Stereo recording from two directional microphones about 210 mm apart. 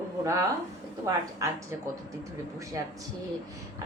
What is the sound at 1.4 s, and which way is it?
Speech, 15° right (ahead or behind).